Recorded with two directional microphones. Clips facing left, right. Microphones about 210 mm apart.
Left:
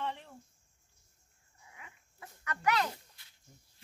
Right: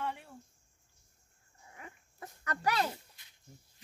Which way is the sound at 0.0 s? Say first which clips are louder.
Even; 10° right (ahead or behind).